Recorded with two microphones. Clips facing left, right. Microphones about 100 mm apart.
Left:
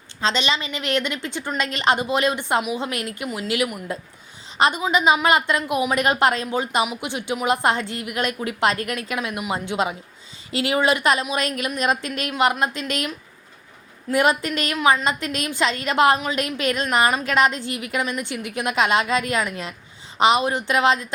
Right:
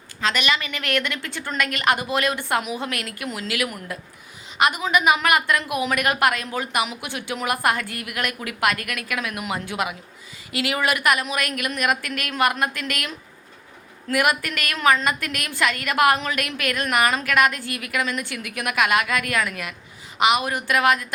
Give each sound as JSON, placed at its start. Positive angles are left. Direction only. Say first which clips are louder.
{"t": 0.2, "sound": "a woman's voice", "louder": "left 1 dB", "side_deg": 25}
{"t": 14.1, "sound": "a woman's voice", "louder": "left 2 dB", "side_deg": 25}